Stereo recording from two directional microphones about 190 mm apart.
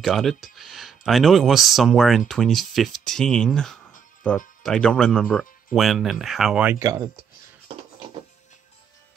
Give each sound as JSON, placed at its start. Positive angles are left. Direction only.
{"t": 0.0, "sound": "speech", "side_deg": 0}